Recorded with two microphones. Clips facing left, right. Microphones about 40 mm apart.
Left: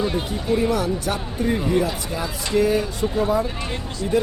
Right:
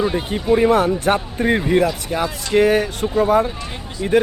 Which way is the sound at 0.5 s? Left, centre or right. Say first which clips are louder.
Right 6 dB; right.